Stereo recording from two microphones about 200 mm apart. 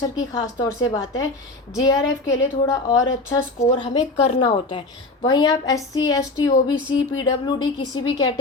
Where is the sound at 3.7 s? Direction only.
30° left (ahead or behind).